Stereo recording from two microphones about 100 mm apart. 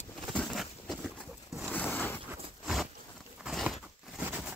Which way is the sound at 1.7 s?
15° left (ahead or behind).